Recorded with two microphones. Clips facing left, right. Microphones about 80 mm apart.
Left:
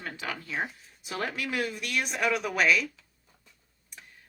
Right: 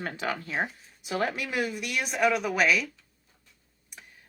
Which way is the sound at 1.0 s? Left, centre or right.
Right.